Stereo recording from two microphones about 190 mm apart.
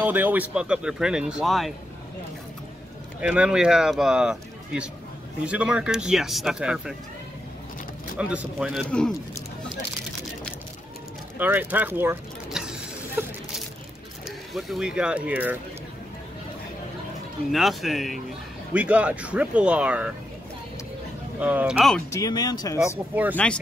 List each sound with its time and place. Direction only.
0.0 s speech: 10° right (ahead or behind)
3.2 s speech: 5° right (ahead or behind)
8.2 s speech: 5° right (ahead or behind)
11.3 s speech: 10° right (ahead or behind)
14.5 s speech: centre (ahead or behind)
17.5 s speech: centre (ahead or behind)
21.4 s speech: 10° right (ahead or behind)
22.1 s speech: 20° left (ahead or behind)
23.3 s speech: 5° left (ahead or behind)